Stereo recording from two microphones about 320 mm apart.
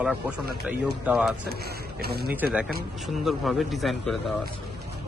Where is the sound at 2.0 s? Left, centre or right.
Right.